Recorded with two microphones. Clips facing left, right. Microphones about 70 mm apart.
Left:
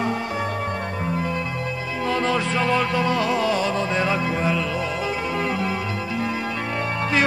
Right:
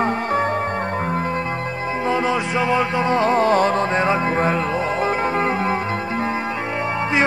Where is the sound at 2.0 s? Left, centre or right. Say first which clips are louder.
Right 2 dB; centre; by 6.3 s right.